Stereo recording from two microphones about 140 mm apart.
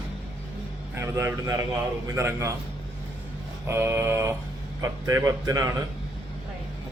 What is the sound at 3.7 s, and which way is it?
Speech, 15° right (ahead or behind).